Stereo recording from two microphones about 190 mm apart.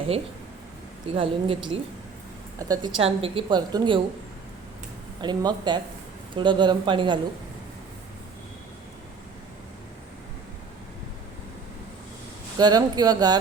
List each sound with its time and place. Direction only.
1.1 s a woman's voice: 30° right (ahead or behind)
3.0 s a woman's voice: 30° right (ahead or behind)
5.2 s a woman's voice: 20° right (ahead or behind)
12.5 s a woman's voice: 20° right (ahead or behind)